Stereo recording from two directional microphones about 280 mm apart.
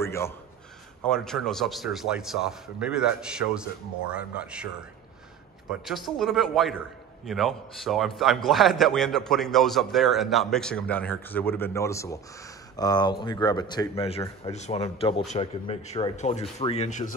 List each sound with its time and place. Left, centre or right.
0.0 s a man's voice: centre
5.7 s a man's voice: centre; by 17.1 s left